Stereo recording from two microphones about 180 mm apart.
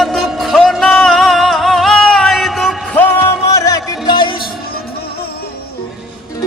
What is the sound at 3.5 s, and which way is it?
Music, 20° left (ahead or behind).